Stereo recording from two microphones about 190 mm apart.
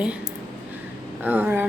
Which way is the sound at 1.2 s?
10° right (ahead or behind).